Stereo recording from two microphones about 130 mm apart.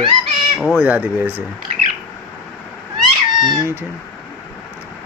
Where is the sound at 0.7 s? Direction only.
10° right (ahead or behind).